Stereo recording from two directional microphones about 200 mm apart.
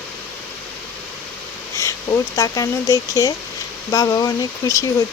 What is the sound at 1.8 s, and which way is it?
Speech, 15° left (ahead or behind).